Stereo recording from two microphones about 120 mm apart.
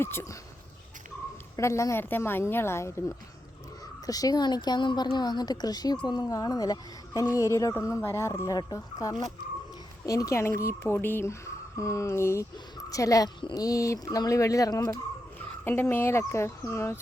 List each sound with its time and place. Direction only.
0.0 s a woman's voice: 20° left (ahead or behind)
1.5 s a woman's voice: 25° left (ahead or behind)
15.6 s a woman's voice: 20° left (ahead or behind)